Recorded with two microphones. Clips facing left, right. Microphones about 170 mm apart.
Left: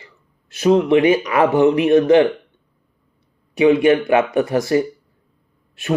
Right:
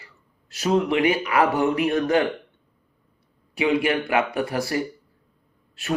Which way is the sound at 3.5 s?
25° left (ahead or behind).